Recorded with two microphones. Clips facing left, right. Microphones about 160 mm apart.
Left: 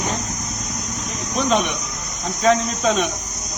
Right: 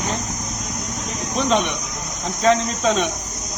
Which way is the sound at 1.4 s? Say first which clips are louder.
Even; 5° left (ahead or behind).